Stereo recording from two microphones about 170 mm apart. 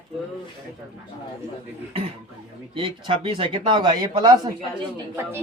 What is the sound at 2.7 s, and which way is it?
Speech, 30° right (ahead or behind).